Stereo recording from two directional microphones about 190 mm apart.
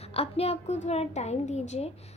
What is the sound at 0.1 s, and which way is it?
A woman's voice, 30° left (ahead or behind).